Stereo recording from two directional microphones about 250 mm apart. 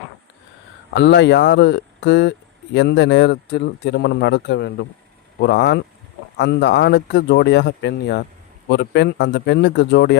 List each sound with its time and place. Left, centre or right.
0.9 s speech: left